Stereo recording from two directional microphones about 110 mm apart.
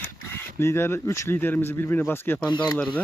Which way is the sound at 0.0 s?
20° left (ahead or behind).